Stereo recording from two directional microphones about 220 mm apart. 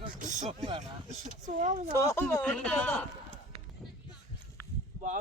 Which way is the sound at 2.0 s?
10° left (ahead or behind).